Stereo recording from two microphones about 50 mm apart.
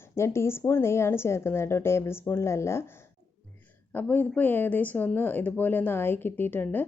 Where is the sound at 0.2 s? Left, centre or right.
Left.